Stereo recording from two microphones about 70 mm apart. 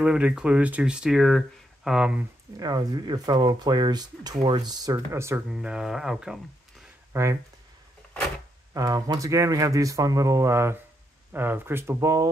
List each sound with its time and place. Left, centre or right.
0.0 s speech: centre
1.9 s speech: centre
2.6 s speech: right
5.1 s speech: right
5.5 s speech: centre
7.1 s speech: right
8.7 s speech: right
11.3 s speech: right